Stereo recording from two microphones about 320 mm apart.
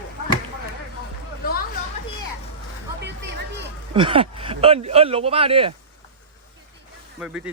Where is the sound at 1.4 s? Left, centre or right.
Left.